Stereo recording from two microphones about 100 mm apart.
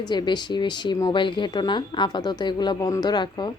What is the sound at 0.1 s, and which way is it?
Speech, 45° left (ahead or behind).